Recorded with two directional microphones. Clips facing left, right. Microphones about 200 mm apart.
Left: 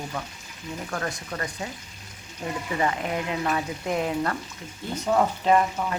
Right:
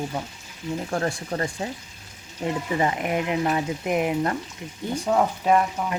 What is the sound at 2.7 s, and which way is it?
Speech, 20° right (ahead or behind).